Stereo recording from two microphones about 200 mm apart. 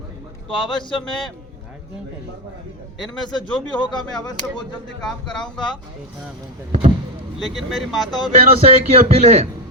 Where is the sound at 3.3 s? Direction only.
20° left (ahead or behind).